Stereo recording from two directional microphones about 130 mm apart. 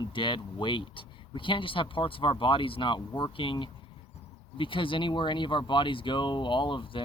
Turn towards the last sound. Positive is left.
turn(degrees=40)  # may be behind; listen again after turning